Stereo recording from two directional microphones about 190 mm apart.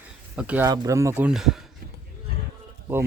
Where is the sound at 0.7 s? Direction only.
20° right (ahead or behind); by 1.6 s centre (ahead or behind).